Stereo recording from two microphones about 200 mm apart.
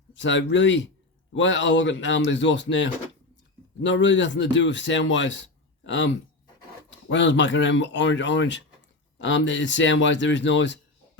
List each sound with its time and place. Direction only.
0.1 s speech: 65° left (ahead or behind)
7.1 s speech: 65° left (ahead or behind)